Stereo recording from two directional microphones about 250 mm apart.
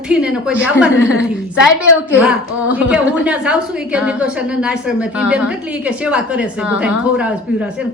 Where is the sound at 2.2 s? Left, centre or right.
Centre.